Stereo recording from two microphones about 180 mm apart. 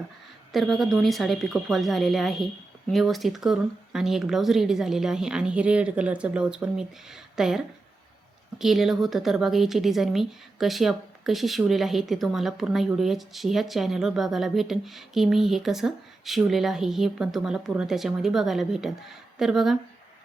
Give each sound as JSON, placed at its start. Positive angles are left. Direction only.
{"t": 0.5, "sound": "a woman's voice", "side_deg": 0}